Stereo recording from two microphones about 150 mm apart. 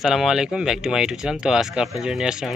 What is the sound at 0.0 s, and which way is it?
Speech, centre (ahead or behind).